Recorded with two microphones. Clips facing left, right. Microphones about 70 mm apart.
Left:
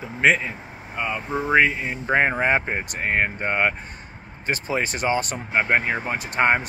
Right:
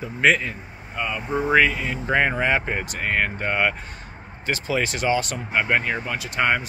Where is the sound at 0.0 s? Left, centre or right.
Left.